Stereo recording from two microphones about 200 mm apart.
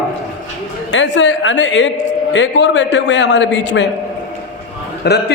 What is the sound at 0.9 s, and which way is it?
A woman's voice, 65° left (ahead or behind).